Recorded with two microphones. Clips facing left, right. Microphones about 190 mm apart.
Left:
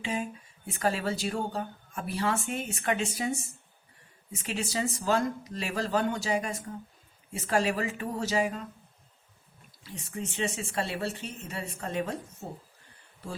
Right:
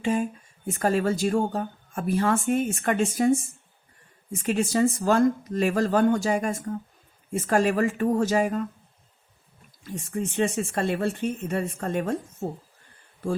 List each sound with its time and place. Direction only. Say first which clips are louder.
0.0 s speech: right 8 dB; 50° right (ahead or behind)
9.8 s speech: right 7 dB; 50° right (ahead or behind)